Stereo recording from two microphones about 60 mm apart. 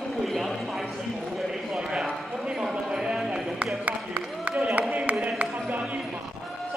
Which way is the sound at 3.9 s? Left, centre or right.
Right.